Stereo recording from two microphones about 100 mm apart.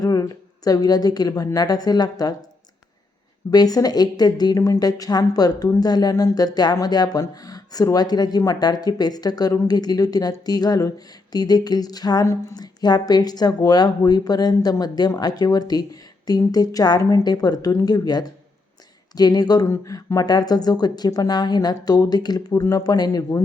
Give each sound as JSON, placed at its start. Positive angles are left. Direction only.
{"t": 0.0, "sound": "a woman's voice", "side_deg": 35}
{"t": 3.5, "sound": "a woman's voice", "side_deg": 40}
{"t": 19.6, "sound": "a woman's voice", "side_deg": 30}